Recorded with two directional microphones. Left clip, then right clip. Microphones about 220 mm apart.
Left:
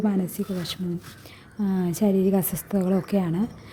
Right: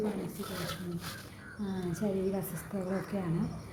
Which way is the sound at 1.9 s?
45° left (ahead or behind).